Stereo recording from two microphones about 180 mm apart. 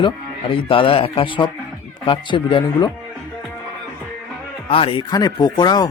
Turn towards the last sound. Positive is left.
turn(degrees=25)  # may be behind; listen again after turning